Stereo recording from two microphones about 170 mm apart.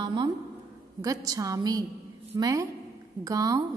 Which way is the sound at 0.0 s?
25° right (ahead or behind).